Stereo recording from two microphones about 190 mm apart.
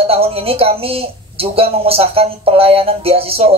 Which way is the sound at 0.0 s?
30° right (ahead or behind).